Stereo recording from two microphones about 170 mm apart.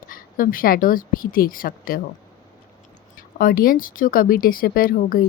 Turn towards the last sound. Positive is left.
turn(degrees=60)  # may be behind; listen again after turning